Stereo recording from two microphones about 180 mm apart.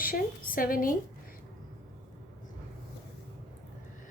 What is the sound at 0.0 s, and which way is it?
Speech, 50° left (ahead or behind).